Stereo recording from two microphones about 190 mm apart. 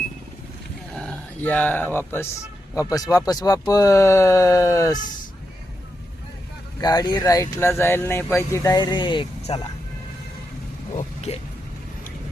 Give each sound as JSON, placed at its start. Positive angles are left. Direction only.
{"t": 0.9, "sound": "speech", "side_deg": 5}
{"t": 6.7, "sound": "speech", "side_deg": 20}
{"t": 10.9, "sound": "vehicle", "side_deg": 35}